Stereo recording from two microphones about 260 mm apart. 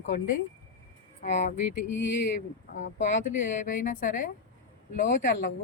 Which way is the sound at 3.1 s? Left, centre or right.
Left.